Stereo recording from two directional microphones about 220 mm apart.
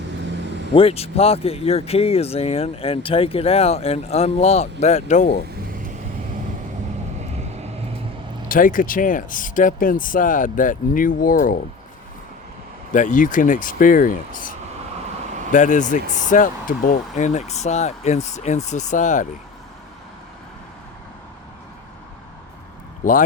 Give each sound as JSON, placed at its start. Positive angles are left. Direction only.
{"t": 0.7, "sound": "speech", "side_deg": 25}
{"t": 8.4, "sound": "speech", "side_deg": 40}
{"t": 12.9, "sound": "speech", "side_deg": 35}
{"t": 15.5, "sound": "speech", "side_deg": 35}
{"t": 23.0, "sound": "speech", "side_deg": 10}